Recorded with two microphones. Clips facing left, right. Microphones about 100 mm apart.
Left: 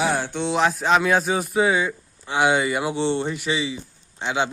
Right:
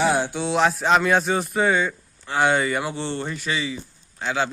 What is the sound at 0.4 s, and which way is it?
A man's voice, centre (ahead or behind).